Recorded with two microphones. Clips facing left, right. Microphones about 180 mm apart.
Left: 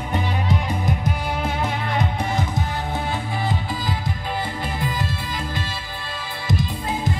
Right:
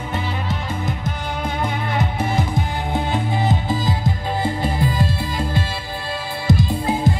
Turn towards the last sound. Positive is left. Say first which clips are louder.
# right 6 dB
turn(degrees=-30)  # may be behind; listen again after turning